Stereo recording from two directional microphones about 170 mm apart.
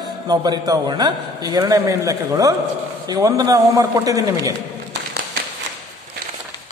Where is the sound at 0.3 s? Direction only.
20° right (ahead or behind).